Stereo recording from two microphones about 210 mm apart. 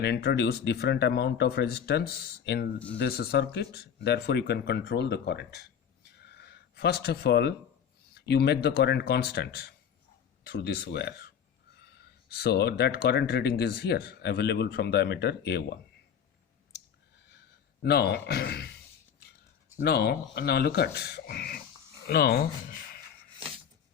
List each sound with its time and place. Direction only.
0.0 s speech: 50° left (ahead or behind)
6.2 s a sound: 50° left (ahead or behind)
8.1 s speech: 50° left (ahead or behind)
17.8 s speech: 50° left (ahead or behind)
19.8 s speech: 50° left (ahead or behind)